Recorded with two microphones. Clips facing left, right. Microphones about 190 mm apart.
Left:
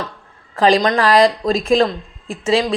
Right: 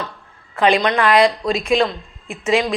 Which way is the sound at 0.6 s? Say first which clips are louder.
Left 2 dB; 40° left (ahead or behind).